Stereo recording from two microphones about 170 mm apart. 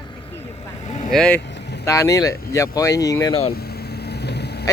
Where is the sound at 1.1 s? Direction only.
5° left (ahead or behind).